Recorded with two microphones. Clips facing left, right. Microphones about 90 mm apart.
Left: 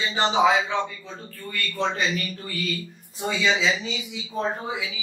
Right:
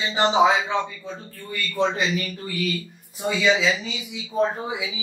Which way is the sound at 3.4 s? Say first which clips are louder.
Right 2 dB; 5° right (ahead or behind).